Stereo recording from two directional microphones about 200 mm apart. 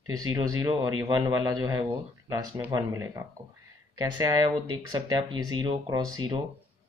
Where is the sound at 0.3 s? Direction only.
20° right (ahead or behind).